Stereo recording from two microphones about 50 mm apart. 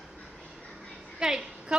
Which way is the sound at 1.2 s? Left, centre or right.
Centre.